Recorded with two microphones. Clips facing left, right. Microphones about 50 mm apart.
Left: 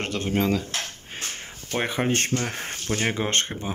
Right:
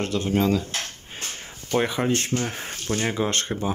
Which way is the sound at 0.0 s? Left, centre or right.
Left.